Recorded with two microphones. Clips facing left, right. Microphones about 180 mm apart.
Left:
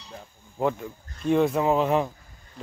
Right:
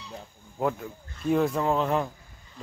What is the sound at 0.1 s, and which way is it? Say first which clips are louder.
Speech: right 1 dB; centre (ahead or behind).